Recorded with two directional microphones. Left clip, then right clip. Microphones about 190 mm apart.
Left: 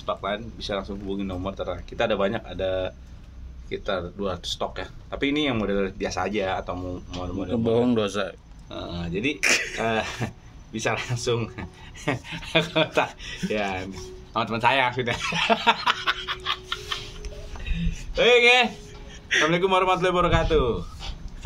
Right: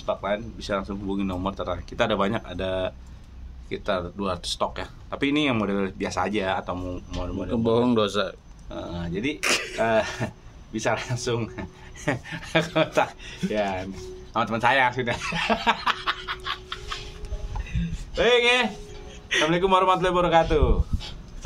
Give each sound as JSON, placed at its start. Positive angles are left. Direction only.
{"t": 0.0, "sound": "speech", "side_deg": -10}
{"t": 0.6, "sound": "speech", "side_deg": -25}
{"t": 1.0, "sound": "speech", "side_deg": -40}
{"t": 7.2, "sound": "speech", "side_deg": -20}
{"t": 14.3, "sound": "speech", "side_deg": -10}
{"t": 18.1, "sound": "speech", "side_deg": -10}
{"t": 19.2, "sound": "a sound", "side_deg": -20}
{"t": 19.5, "sound": "speech", "side_deg": -5}